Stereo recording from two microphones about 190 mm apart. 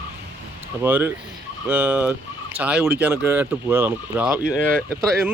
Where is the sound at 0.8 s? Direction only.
10° right (ahead or behind).